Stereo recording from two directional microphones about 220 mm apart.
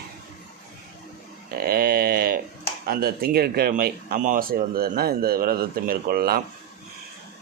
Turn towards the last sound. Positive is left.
turn(degrees=-45)  # may be behind; listen again after turning